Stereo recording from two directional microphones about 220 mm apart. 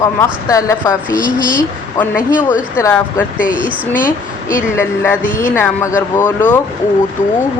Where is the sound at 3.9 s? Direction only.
35° left (ahead or behind).